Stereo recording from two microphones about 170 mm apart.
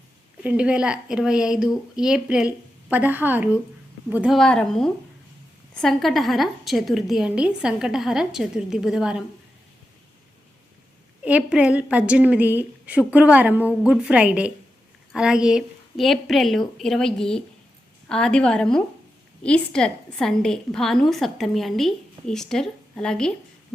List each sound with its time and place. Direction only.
0.4 s a woman's voice: 5° right (ahead or behind)
4.4 s a woman's voice: 5° left (ahead or behind)
11.2 s a woman's voice: 5° right (ahead or behind)